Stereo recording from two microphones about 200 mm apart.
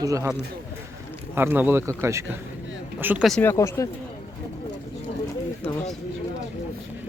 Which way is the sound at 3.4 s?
10° left (ahead or behind).